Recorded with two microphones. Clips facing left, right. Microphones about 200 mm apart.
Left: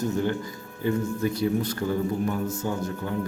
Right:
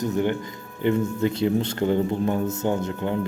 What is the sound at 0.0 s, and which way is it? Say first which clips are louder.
A man's voice: right 2 dB; 20° right (ahead or behind).